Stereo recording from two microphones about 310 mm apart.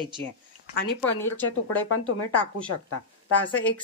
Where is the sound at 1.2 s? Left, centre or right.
Centre.